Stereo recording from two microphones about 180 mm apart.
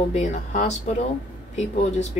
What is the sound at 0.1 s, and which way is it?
Speech, 40° left (ahead or behind).